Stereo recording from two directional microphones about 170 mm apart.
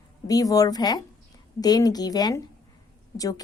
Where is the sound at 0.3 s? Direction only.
20° left (ahead or behind).